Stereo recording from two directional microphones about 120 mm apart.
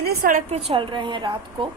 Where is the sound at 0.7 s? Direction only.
45° right (ahead or behind).